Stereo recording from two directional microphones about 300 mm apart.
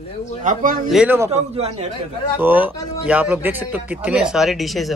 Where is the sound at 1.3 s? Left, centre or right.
Right.